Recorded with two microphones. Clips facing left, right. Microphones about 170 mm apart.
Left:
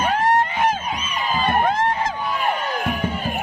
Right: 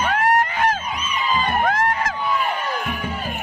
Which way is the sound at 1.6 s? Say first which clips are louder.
Even; 25° left (ahead or behind).